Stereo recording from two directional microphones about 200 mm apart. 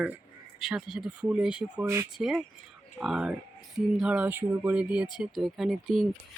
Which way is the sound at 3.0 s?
Centre (ahead or behind).